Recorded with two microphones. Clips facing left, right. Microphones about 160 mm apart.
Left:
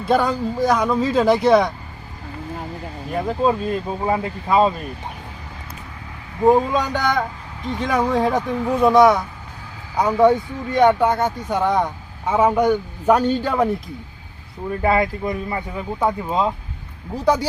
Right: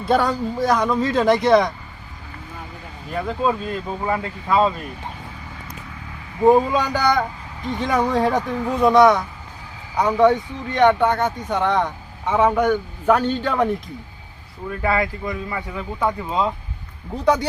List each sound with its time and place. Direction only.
0.0 s speech: centre (ahead or behind)
3.2 s speech: 15° left (ahead or behind)
6.4 s speech: centre (ahead or behind)
14.8 s a man's voice: 25° left (ahead or behind)
16.0 s speech: 10° left (ahead or behind)